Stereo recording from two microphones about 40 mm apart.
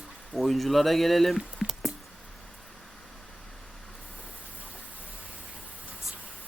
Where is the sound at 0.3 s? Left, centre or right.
Centre.